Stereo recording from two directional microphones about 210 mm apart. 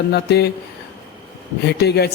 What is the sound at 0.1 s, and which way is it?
Speech, 50° left (ahead or behind).